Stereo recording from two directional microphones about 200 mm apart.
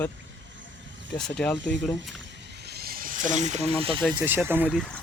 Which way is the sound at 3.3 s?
35° right (ahead or behind).